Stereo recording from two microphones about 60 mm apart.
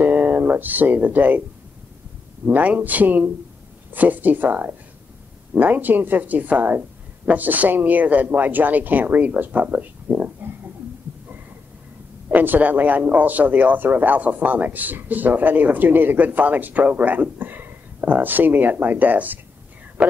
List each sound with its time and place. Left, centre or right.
0.0 s speech: right
2.4 s speech: right
12.3 s speech: right
20.0 s speech: centre